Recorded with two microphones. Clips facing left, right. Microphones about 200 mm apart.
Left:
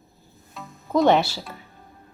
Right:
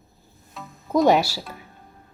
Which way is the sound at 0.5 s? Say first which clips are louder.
Right 1 dB; centre (ahead or behind).